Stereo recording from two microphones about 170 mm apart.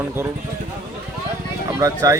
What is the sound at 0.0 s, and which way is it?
Speech, 15° right (ahead or behind).